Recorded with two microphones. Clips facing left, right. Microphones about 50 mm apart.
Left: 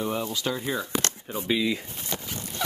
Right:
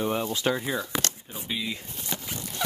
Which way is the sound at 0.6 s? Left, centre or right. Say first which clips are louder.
Left 1 dB; centre.